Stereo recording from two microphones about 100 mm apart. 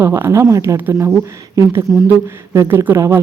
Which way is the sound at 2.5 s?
30° right (ahead or behind).